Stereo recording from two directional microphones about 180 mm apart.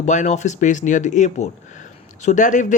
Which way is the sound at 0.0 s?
40° left (ahead or behind).